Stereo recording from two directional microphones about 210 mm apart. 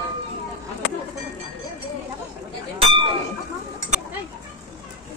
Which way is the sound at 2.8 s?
25° right (ahead or behind).